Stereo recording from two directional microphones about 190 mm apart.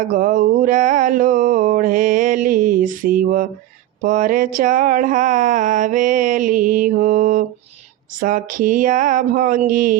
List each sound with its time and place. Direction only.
0.1 s mantra: 45° right (ahead or behind)